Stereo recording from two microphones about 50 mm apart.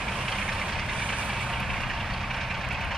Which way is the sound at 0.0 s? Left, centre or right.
Centre.